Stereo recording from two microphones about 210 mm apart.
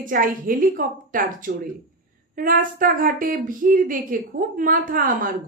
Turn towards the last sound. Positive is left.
turn(degrees=-40)  # may be behind; listen again after turning